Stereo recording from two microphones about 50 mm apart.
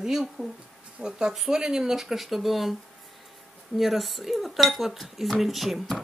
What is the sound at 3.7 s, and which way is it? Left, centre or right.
Speech, centre.